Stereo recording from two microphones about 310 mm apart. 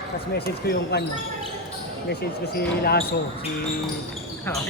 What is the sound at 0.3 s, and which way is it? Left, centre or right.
Speech, left.